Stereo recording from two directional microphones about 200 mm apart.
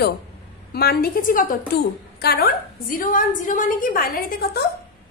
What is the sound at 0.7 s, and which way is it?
A woman's voice, 50° left (ahead or behind).